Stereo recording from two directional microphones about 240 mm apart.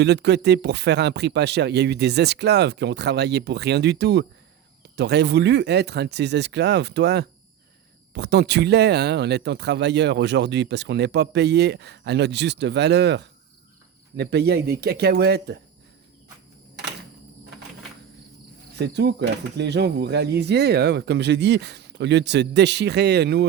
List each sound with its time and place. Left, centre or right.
0.0 s speech: right
18.8 s speech: right